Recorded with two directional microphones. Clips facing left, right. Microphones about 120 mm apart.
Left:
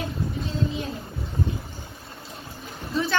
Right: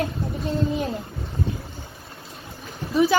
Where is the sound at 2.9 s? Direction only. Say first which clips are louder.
Right 7 dB; 15° right (ahead or behind).